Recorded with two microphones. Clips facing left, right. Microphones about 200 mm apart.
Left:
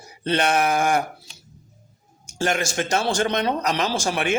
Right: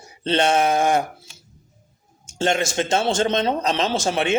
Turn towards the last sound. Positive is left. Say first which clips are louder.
# right 2 dB
turn(degrees=-25)  # may be behind; listen again after turning